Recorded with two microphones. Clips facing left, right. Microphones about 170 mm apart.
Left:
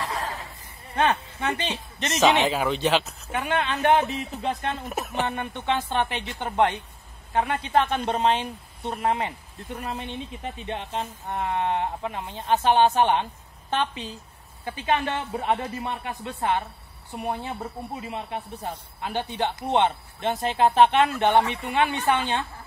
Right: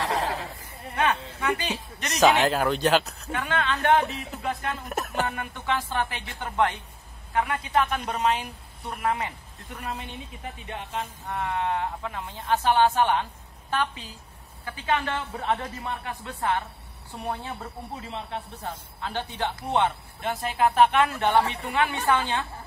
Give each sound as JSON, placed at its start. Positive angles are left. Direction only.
{"t": 0.0, "sound": "a sound", "side_deg": -80}
{"t": 0.9, "sound": "speech", "side_deg": 30}
{"t": 2.4, "sound": "speech", "side_deg": 0}
{"t": 3.3, "sound": "speech", "side_deg": 15}
{"t": 4.8, "sound": "speech", "side_deg": 0}
{"t": 5.2, "sound": "speech", "side_deg": 25}
{"t": 10.4, "sound": "speech", "side_deg": 20}
{"t": 11.7, "sound": "speech", "side_deg": 20}